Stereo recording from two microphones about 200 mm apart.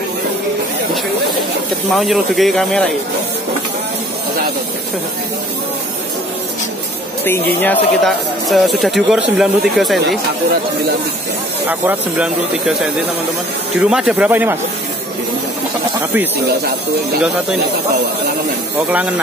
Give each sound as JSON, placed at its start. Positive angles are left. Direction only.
{"t": 2.0, "sound": "speech", "side_deg": 0}
{"t": 7.2, "sound": "speech", "side_deg": 10}
{"t": 9.9, "sound": "speech", "side_deg": -55}
{"t": 11.6, "sound": "speech", "side_deg": -10}
{"t": 13.7, "sound": "speech", "side_deg": -5}
{"t": 18.9, "sound": "speech", "side_deg": -5}